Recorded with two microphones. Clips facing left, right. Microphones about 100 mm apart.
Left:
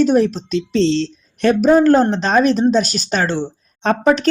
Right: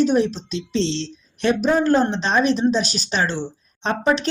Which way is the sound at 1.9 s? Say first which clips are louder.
Left 4 dB; 40° left (ahead or behind).